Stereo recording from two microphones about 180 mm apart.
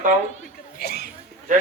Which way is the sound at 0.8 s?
60° left (ahead or behind).